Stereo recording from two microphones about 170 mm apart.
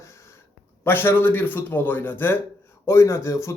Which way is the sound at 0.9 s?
15° left (ahead or behind).